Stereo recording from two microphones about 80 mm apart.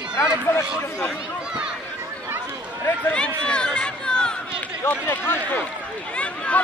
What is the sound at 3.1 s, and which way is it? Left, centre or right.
Speech, centre.